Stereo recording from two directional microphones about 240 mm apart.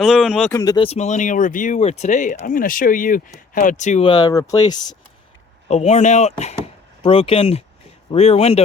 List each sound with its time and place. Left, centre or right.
0.0 s speech: centre
0.5 s speech: centre
5.6 s speech: left